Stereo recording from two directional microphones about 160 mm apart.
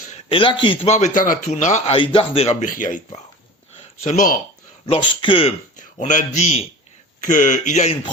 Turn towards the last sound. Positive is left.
turn(degrees=50)  # may be behind; listen again after turning